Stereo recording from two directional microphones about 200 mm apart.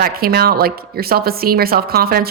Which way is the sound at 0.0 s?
50° right (ahead or behind).